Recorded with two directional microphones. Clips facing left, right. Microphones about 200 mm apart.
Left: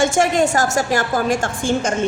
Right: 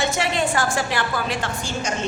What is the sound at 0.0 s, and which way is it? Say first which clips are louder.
A woman's voice: left 7 dB; 45° left (ahead or behind).